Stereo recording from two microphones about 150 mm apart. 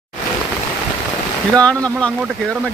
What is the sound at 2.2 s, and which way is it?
Speech, 10° right (ahead or behind).